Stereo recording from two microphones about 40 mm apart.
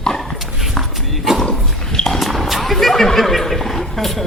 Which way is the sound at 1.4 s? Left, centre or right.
Centre.